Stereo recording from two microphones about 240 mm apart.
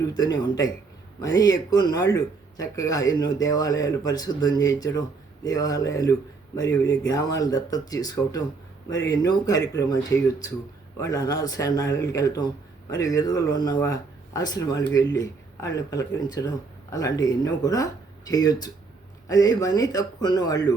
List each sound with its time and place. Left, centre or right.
0.1 s speech: centre